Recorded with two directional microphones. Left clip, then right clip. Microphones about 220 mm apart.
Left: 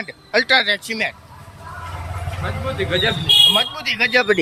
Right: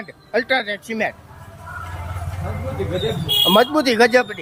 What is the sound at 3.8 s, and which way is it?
Speech, 30° right (ahead or behind).